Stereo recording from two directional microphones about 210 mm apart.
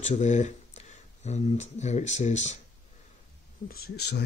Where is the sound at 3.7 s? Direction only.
50° left (ahead or behind).